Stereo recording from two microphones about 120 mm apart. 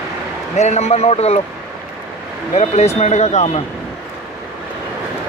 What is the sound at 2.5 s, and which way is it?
Speech, 65° left (ahead or behind).